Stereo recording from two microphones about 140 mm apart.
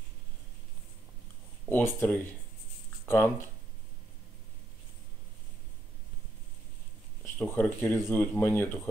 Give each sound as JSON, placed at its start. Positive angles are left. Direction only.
{"t": 1.7, "sound": "speech", "side_deg": 15}
{"t": 7.3, "sound": "speech", "side_deg": 10}